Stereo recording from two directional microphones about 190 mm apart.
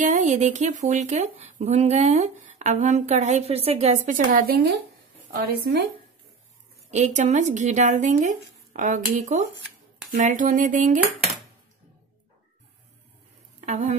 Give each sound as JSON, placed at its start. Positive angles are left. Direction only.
{"t": 0.0, "sound": "speech", "side_deg": -40}
{"t": 6.9, "sound": "speech", "side_deg": -40}
{"t": 10.1, "sound": "a sound", "side_deg": -40}
{"t": 13.7, "sound": "speech", "side_deg": -40}